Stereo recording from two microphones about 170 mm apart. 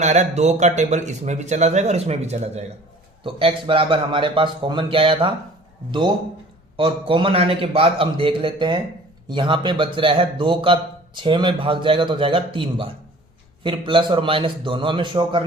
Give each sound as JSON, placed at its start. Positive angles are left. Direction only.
{"t": 0.0, "sound": "a man's voice", "side_deg": -40}
{"t": 6.7, "sound": "a man's voice", "side_deg": -30}